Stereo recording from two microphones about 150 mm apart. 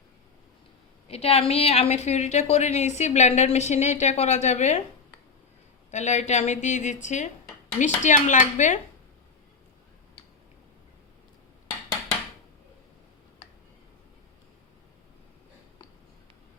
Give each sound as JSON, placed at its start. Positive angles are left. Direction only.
{"t": 1.0, "sound": "a woman's voice", "side_deg": 45}
{"t": 5.9, "sound": "a woman's voice", "side_deg": 50}